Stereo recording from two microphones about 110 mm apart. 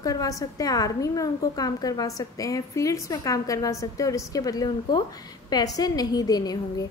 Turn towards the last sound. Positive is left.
turn(degrees=35)  # may be behind; listen again after turning